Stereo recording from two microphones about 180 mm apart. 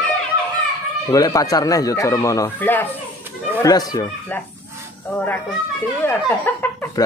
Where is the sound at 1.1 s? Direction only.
20° left (ahead or behind).